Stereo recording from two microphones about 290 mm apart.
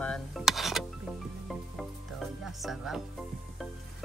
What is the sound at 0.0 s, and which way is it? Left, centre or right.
Music, centre.